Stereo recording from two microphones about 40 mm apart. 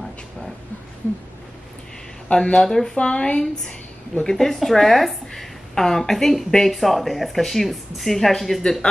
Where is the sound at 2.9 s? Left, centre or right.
Left.